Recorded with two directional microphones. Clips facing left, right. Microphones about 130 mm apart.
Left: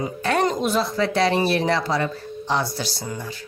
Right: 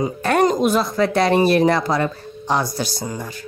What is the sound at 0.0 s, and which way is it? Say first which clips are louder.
Speech: right 4 dB; 45° right (ahead or behind).